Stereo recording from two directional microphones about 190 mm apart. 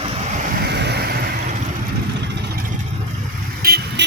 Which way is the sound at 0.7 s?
60° right (ahead or behind).